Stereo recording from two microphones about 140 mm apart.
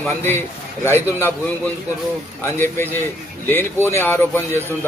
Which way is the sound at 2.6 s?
15° left (ahead or behind).